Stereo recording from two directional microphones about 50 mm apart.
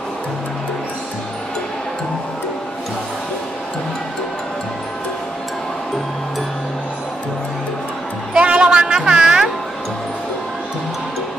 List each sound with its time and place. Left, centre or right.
8.3 s music: right